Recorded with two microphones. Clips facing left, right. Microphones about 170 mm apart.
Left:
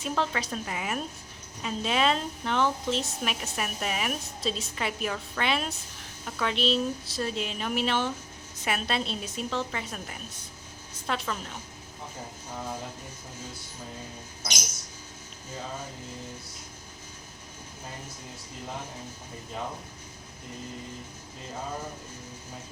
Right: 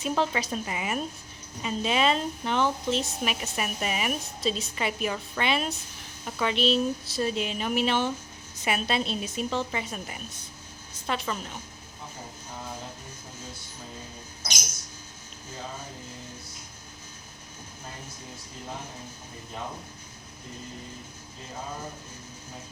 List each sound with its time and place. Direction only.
0.0 s a woman's voice: 5° right (ahead or behind)